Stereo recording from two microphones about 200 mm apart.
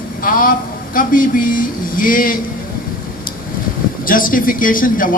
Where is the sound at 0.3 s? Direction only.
45° left (ahead or behind).